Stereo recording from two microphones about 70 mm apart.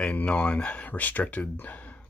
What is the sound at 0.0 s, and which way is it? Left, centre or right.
Speech, centre.